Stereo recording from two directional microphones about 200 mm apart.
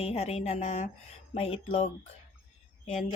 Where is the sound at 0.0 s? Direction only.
30° left (ahead or behind).